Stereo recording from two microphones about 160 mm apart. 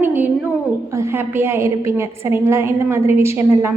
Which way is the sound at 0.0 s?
10° right (ahead or behind).